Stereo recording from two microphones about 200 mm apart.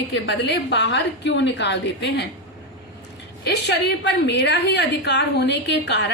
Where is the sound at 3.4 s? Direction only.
55° left (ahead or behind).